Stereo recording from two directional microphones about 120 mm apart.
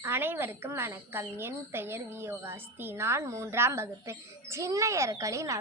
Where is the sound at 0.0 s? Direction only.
20° right (ahead or behind).